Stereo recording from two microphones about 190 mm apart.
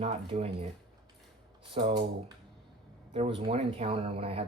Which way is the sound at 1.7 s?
30° right (ahead or behind).